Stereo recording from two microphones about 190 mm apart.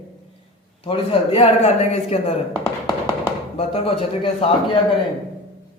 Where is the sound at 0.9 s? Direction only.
30° left (ahead or behind).